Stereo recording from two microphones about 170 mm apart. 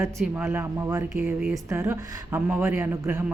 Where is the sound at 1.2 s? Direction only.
5° right (ahead or behind).